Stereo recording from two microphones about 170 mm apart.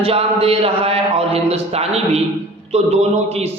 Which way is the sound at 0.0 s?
35° right (ahead or behind).